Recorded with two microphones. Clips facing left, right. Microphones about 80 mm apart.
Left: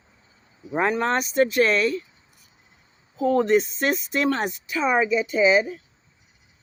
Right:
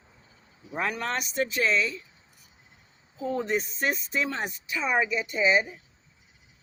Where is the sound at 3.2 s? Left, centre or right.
Left.